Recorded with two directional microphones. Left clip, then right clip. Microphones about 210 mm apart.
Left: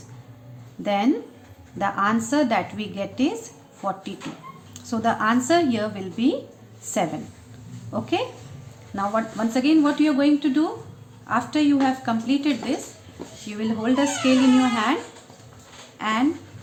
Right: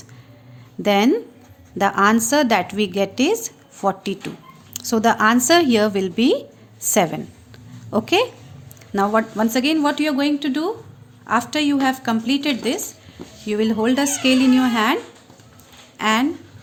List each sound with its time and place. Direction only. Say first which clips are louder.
0.8 s a woman's voice: right 5 dB; 55° right (ahead or behind)
7.9 s a woman's voice: right 7 dB; 55° right (ahead or behind)
16.0 s speech: right 6 dB; 55° right (ahead or behind)